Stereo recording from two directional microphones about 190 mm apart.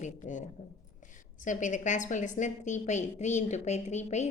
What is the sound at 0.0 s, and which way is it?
A woman's voice, 40° left (ahead or behind).